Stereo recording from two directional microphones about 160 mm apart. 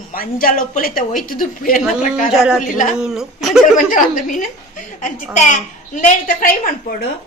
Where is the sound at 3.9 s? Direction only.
55° left (ahead or behind).